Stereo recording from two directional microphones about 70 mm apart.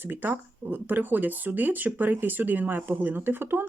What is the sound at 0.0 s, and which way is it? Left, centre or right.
Speech, right.